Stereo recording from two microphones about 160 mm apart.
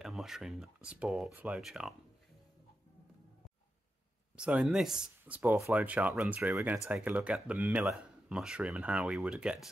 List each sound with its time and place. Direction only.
0.0 s speech: centre (ahead or behind)
4.4 s speech: 5° right (ahead or behind)